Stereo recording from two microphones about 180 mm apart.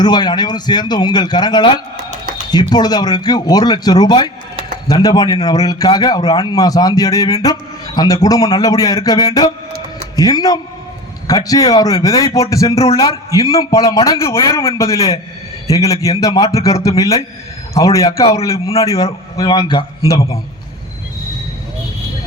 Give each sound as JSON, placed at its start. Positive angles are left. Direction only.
{"t": 0.0, "sound": "a man's voice", "side_deg": 25}
{"t": 12.7, "sound": "a man's voice", "side_deg": 35}
{"t": 13.0, "sound": "a man's voice", "side_deg": 20}
{"t": 18.2, "sound": "a man's voice", "side_deg": 35}
{"t": 18.4, "sound": "a man's voice", "side_deg": 15}